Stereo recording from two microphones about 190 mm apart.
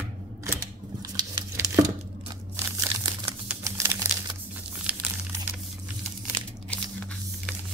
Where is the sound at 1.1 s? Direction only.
20° right (ahead or behind).